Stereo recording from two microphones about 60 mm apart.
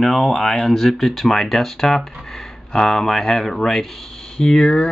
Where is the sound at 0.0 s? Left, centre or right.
Centre.